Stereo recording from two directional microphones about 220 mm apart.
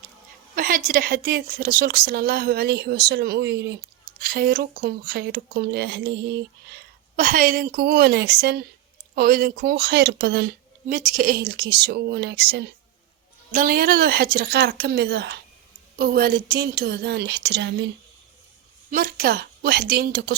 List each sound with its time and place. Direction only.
0.5 s a woman's voice: 40° right (ahead or behind)
7.2 s a woman's voice: 40° right (ahead or behind)
18.9 s a woman's voice: 45° right (ahead or behind)